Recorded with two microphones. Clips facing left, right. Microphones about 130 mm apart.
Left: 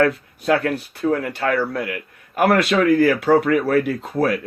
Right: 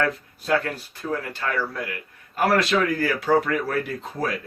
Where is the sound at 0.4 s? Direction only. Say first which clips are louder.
Left 5 dB; 60° left (ahead or behind).